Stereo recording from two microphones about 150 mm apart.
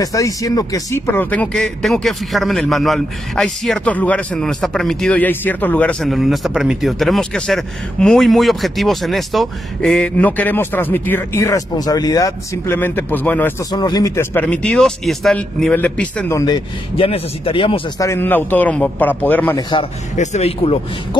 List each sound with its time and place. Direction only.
0.0 s speech: 20° left (ahead or behind)
13.7 s a man's voice: 25° left (ahead or behind)
14.4 s speech: 10° left (ahead or behind)
16.3 s speech: 25° left (ahead or behind)
17.9 s speech: 20° left (ahead or behind)
20.2 s speech: 45° left (ahead or behind)